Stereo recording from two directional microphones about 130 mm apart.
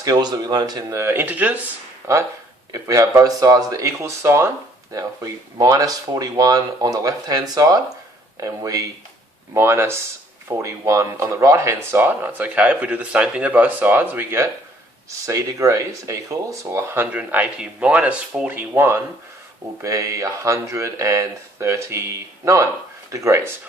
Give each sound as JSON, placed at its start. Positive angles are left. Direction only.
{"t": 0.0, "sound": "speech", "side_deg": -30}
{"t": 23.1, "sound": "speech", "side_deg": -20}